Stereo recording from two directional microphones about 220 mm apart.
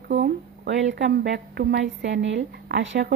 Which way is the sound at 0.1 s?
55° right (ahead or behind).